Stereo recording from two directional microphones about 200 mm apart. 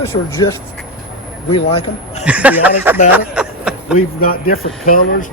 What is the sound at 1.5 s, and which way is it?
Speech, 30° left (ahead or behind).